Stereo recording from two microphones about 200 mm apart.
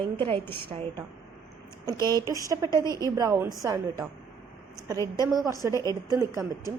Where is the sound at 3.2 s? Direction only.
15° right (ahead or behind).